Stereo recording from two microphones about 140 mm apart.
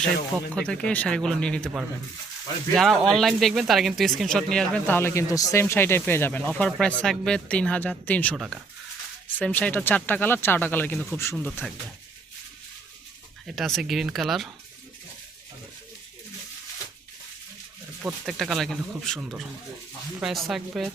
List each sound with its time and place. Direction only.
0.6 s speech: 5° left (ahead or behind)
2.7 s speech: centre (ahead or behind)
9.4 s speech: 10° left (ahead or behind)
13.5 s speech: centre (ahead or behind)
18.0 s speech: centre (ahead or behind)